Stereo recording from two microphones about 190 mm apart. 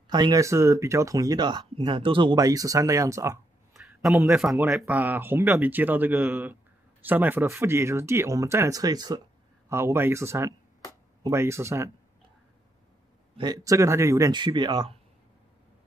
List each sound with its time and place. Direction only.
0.1 s speech: 20° right (ahead or behind)
3.7 s a sound: centre (ahead or behind)
4.4 s speech: centre (ahead or behind)
13.4 s speech: 20° right (ahead or behind)